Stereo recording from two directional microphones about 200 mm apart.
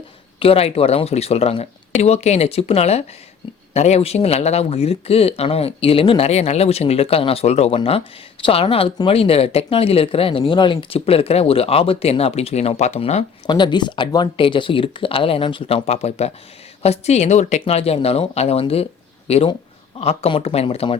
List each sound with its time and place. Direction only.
0.3 s speech: 30° left (ahead or behind)